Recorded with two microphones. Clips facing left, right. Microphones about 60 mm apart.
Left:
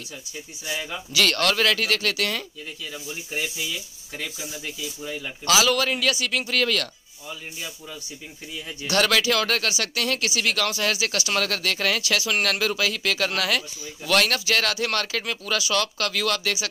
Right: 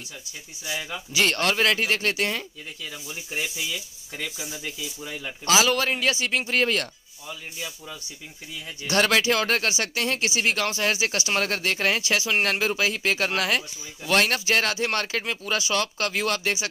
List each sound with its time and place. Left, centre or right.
0.7 s speech: centre
1.1 s speech: right
2.9 s speech: centre
5.5 s a man's voice: right
7.2 s speech: centre
8.8 s speech: right